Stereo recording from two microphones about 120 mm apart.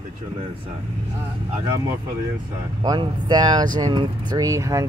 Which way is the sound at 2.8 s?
35° right (ahead or behind).